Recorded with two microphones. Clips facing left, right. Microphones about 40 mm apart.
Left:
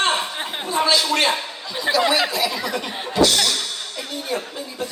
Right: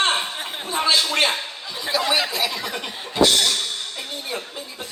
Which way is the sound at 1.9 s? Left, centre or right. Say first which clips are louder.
Left 4 dB; left.